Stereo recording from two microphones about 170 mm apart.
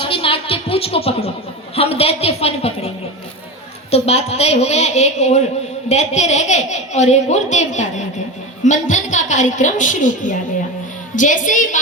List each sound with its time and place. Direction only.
0.0 s a sound: 35° left (ahead or behind)
1.7 s a woman's voice: 35° left (ahead or behind)
3.9 s a woman's voice: 40° left (ahead or behind)